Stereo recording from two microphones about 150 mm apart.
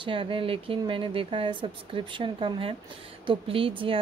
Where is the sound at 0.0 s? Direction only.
35° right (ahead or behind).